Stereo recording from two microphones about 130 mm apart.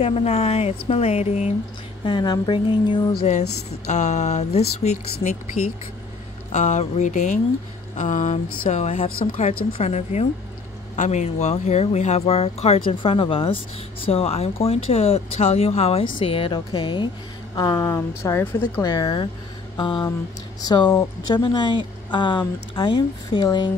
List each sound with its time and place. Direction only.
0.0 s speech: 50° left (ahead or behind)
2.0 s speech: 35° left (ahead or behind)
3.3 s speech: 60° left (ahead or behind)
6.5 s speech: 65° left (ahead or behind)
8.6 s speech: 55° left (ahead or behind); by 17.1 s 40° left (ahead or behind)
17.6 s a woman's voice: 25° left (ahead or behind)
18.9 s speech: 35° left (ahead or behind)